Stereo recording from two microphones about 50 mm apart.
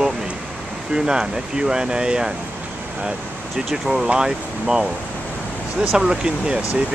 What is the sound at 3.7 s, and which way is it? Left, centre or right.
Speech, centre.